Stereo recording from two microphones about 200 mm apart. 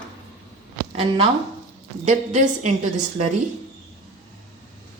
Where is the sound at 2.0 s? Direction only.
35° right (ahead or behind).